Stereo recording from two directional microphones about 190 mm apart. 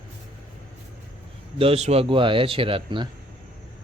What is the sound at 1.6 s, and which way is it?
Speech, 30° right (ahead or behind).